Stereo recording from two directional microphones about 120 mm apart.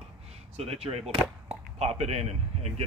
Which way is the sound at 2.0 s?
60° right (ahead or behind).